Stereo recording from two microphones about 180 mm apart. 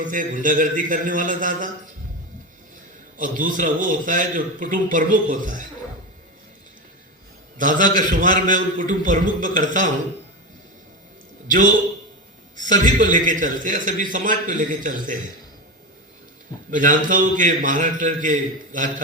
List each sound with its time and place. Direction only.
0.0 s a man's voice: 45° right (ahead or behind)
3.2 s a man's voice: 50° right (ahead or behind)
7.6 s a man's voice: 45° right (ahead or behind)
12.6 s a man's voice: 45° right (ahead or behind)
16.7 s a man's voice: 45° right (ahead or behind)